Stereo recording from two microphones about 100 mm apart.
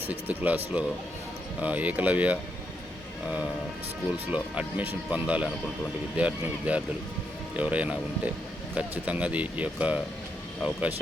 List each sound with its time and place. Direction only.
0.0 s speech: 15° right (ahead or behind)
4.1 s speech: 15° right (ahead or behind)